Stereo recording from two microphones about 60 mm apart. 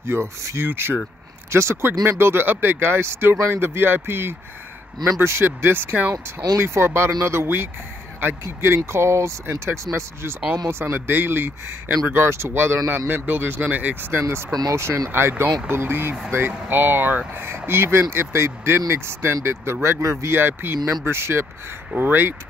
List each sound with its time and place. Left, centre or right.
0.0 s speech: right
0.6 s a man's voice: right
6.1 s speech: right
6.6 s a man's voice: right
14.5 s speech: right
15.0 s a man's voice: right
20.3 s a man's voice: right